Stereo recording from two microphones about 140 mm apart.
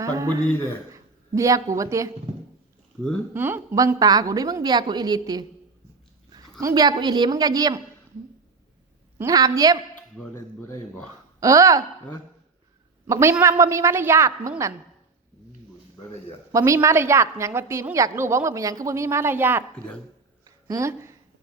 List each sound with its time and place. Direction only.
0.0 s a man's voice: 25° right (ahead or behind)
3.3 s a woman's voice: 15° right (ahead or behind)
9.1 s a woman's voice: 25° right (ahead or behind)
9.9 s speech: 15° left (ahead or behind)
11.3 s a woman's voice: 25° right (ahead or behind)
13.1 s a woman's voice: 20° right (ahead or behind)
16.5 s a woman's voice: 20° right (ahead or behind)
20.4 s a sound: 25° right (ahead or behind)